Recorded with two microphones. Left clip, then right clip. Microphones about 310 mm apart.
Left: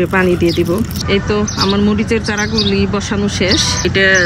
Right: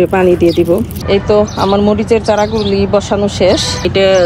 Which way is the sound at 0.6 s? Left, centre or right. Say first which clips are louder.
Right 4 dB; centre.